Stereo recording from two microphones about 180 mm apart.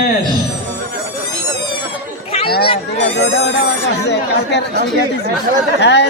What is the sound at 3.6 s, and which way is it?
Speech, 70° left (ahead or behind).